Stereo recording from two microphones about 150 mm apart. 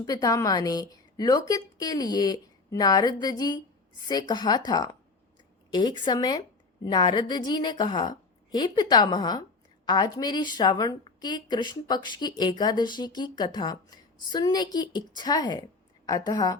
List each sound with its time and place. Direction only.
0.0 s speech: 25° left (ahead or behind)